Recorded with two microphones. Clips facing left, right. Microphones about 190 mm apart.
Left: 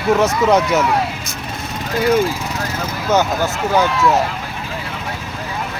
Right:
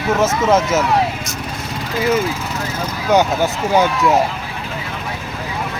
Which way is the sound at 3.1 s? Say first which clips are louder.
Right 2 dB; 15° right (ahead or behind).